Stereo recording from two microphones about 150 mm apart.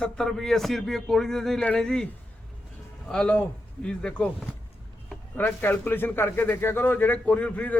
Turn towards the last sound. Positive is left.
turn(degrees=10)  # may be behind; listen again after turning